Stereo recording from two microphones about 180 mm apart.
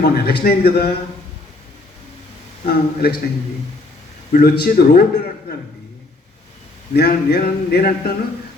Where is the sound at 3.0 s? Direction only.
65° left (ahead or behind).